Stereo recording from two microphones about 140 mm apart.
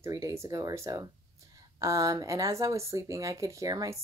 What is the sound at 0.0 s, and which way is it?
Speech, 20° right (ahead or behind).